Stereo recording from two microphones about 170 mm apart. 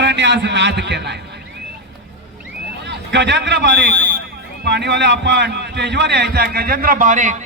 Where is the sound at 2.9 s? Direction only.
90° right.